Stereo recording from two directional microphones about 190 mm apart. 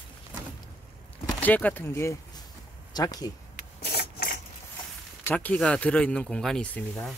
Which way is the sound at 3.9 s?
55° left (ahead or behind).